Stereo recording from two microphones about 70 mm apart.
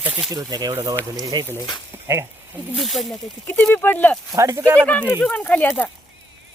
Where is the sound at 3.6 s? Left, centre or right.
Left.